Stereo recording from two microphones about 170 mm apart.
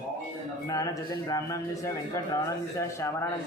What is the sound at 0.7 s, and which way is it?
A man's voice, 20° left (ahead or behind).